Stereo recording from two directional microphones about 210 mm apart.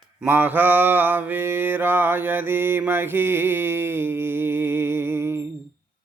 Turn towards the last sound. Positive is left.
turn(degrees=-10)  # may be behind; listen again after turning